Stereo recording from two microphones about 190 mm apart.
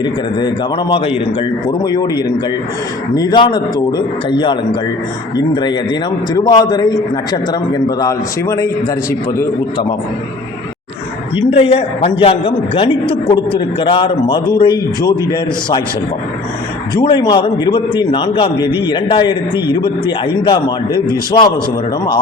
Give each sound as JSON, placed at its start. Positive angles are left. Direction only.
{"t": 0.0, "sound": "a woman's voice", "side_deg": 25}
{"t": 11.5, "sound": "a woman's voice", "side_deg": 30}
{"t": 16.9, "sound": "a woman's voice", "side_deg": 25}